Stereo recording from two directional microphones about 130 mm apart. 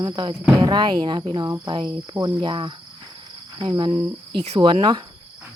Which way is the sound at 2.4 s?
40° right (ahead or behind).